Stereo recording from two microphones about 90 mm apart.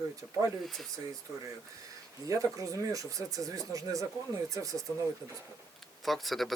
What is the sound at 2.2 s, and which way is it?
Speech, 40° right (ahead or behind).